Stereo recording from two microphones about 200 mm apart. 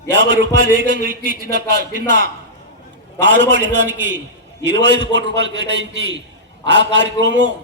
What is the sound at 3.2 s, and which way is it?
A man's voice, 65° right (ahead or behind).